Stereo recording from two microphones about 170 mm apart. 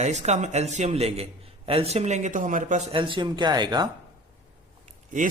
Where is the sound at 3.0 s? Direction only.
30° right (ahead or behind).